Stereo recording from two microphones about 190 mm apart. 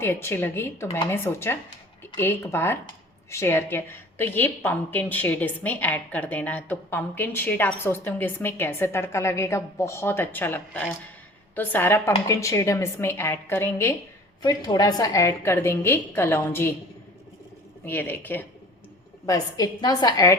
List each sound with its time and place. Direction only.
0.0 s speech: 10° left (ahead or behind)
17.8 s a woman's voice: 10° left (ahead or behind)